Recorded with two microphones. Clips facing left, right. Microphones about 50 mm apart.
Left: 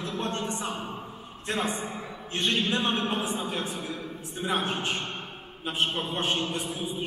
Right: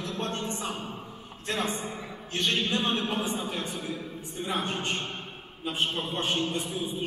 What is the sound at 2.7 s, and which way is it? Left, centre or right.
A man's voice, left.